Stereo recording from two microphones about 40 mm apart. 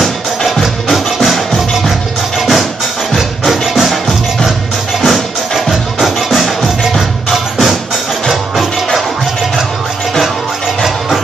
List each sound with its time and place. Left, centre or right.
0.0 s music: centre